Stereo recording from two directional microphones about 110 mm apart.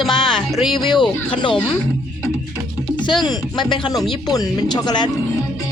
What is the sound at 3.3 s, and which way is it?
Speech, 40° left (ahead or behind).